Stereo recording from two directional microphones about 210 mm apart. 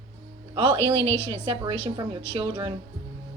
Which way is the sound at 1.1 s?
10° left (ahead or behind).